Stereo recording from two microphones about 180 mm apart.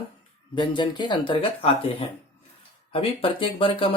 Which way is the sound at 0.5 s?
25° left (ahead or behind).